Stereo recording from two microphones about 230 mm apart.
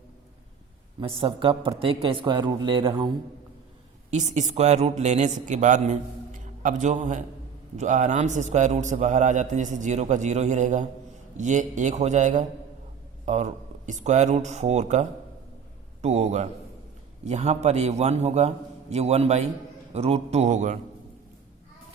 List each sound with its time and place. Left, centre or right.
0.9 s a man's voice: right
4.1 s a man's voice: right